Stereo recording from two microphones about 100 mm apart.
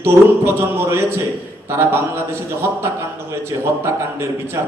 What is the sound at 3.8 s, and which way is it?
Speech, 25° right (ahead or behind).